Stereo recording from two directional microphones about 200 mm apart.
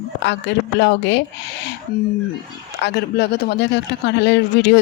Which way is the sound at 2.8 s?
55° left (ahead or behind).